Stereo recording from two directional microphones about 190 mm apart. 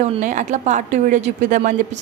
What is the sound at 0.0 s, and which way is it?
A woman's voice, 40° right (ahead or behind).